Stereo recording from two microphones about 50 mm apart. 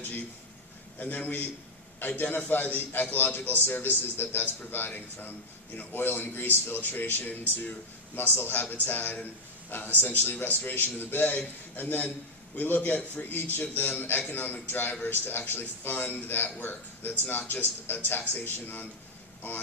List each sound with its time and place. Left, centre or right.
0.9 s a man's voice: left